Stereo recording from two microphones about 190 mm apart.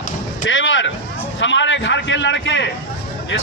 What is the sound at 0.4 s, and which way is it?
A man's voice, 80° left.